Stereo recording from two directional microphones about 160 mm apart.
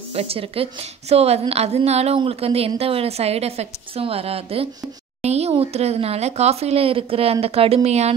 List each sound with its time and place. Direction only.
0.1 s a woman's voice: 35° right (ahead or behind)